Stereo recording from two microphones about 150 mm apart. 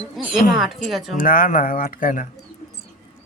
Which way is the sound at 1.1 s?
65° left (ahead or behind).